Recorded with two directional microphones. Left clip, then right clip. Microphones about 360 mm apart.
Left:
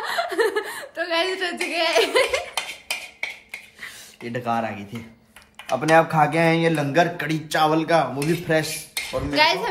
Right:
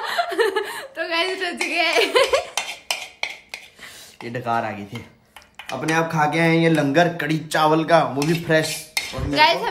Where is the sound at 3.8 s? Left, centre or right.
Centre.